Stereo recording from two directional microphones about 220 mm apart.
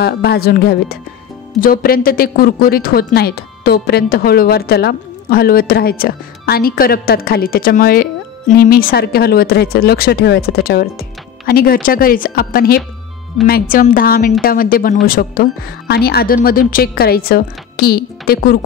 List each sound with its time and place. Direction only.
0.0 s a woman's voice: 45° left (ahead or behind)